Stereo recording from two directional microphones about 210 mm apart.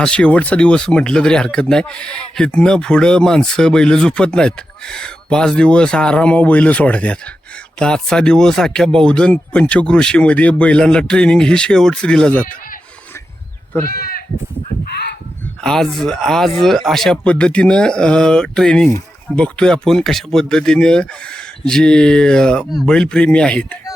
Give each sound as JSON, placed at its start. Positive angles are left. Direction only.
{"t": 0.0, "sound": "speech", "side_deg": 5}
{"t": 13.8, "sound": "speech", "side_deg": 45}
{"t": 15.6, "sound": "speech", "side_deg": 5}